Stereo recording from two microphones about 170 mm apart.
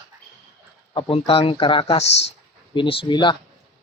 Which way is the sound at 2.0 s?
90° left.